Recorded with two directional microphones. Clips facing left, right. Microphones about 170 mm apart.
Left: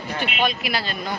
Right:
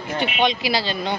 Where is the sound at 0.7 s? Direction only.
30° right (ahead or behind).